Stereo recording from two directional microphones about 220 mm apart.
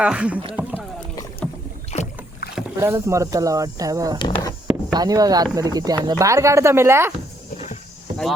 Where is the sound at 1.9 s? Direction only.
30° left (ahead or behind).